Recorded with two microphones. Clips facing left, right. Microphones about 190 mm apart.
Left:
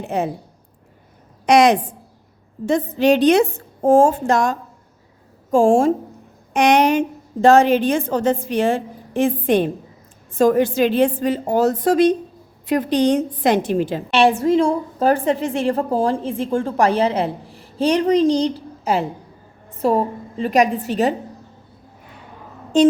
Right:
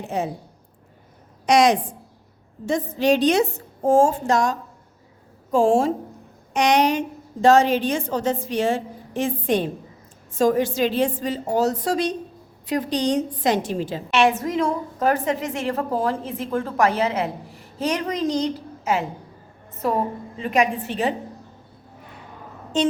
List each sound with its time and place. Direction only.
0.1 s a woman's voice: 60° left (ahead or behind)
1.5 s a woman's voice: 60° left (ahead or behind)
14.1 s a woman's voice: 30° left (ahead or behind)